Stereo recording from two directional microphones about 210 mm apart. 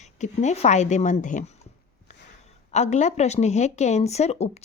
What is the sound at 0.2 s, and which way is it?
Speech, 35° left (ahead or behind).